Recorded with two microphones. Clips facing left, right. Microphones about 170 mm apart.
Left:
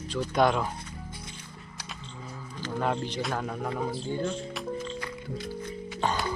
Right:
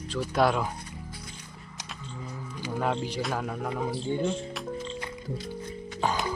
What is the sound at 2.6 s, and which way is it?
Music, 10° right (ahead or behind).